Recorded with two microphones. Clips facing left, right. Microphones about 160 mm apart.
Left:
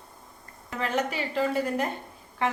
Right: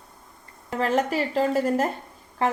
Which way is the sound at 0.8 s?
40° right (ahead or behind).